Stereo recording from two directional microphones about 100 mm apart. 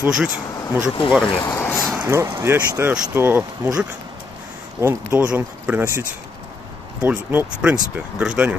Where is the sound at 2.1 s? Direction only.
30° right (ahead or behind).